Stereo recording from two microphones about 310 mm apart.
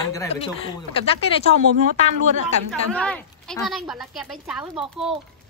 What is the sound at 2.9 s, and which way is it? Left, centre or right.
A woman's voice, centre.